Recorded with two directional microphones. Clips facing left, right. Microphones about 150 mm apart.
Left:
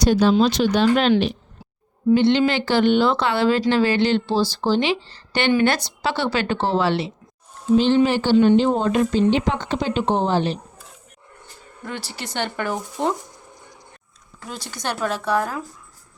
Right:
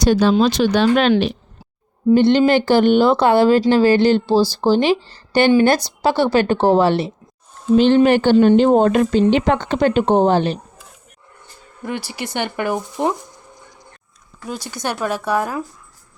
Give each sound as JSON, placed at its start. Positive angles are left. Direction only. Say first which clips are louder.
{"t": 0.0, "sound": "speech", "louder": "right 2 dB", "side_deg": -85}
{"t": 2.1, "sound": "speech", "louder": "right 5 dB", "side_deg": -45}
{"t": 7.8, "sound": "speech", "louder": "right 5 dB", "side_deg": -60}
{"t": 11.9, "sound": "speech", "louder": "right 6 dB", "side_deg": -10}
{"t": 14.5, "sound": "speech", "louder": "right 3 dB", "side_deg": -10}